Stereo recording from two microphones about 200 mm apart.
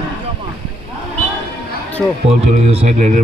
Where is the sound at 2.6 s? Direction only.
35° right (ahead or behind).